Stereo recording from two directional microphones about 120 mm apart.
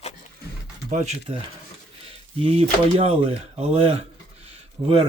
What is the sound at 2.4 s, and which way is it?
Speech, 55° right (ahead or behind).